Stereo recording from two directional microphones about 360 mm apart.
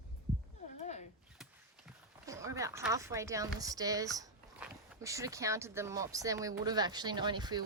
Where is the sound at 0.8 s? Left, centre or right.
Centre.